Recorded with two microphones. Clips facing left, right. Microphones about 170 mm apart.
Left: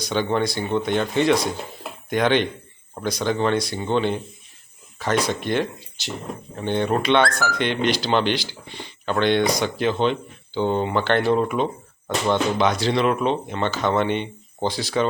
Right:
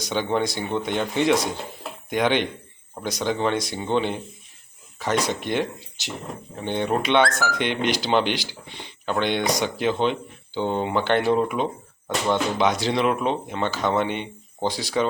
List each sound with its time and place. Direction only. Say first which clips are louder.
0.1 s speech: left 2 dB; 15° right (ahead or behind)
6.7 s speech: left 2 dB; 15° right (ahead or behind)